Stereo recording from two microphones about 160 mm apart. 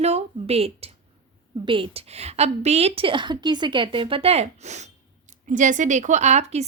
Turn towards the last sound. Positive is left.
turn(degrees=-45)  # may be behind; listen again after turning